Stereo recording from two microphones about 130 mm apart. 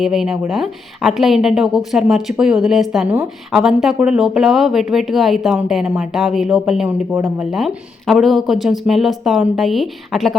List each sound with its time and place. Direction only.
0.0 s a woman's voice: 5° right (ahead or behind)
7.1 s speech: 15° right (ahead or behind)
7.5 s a woman's voice: centre (ahead or behind)